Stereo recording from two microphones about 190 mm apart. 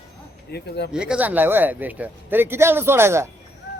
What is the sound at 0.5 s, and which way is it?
Speech, 60° left (ahead or behind).